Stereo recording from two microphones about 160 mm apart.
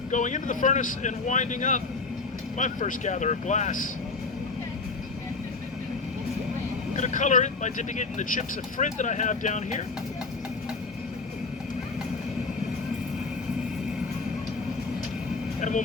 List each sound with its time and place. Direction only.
0.1 s speech: 50° left (ahead or behind)
6.9 s speech: 50° left (ahead or behind)